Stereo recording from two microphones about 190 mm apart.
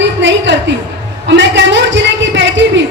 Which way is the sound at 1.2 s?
70° right (ahead or behind).